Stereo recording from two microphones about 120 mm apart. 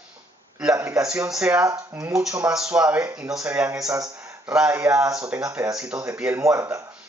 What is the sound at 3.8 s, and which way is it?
Speech, 30° right (ahead or behind).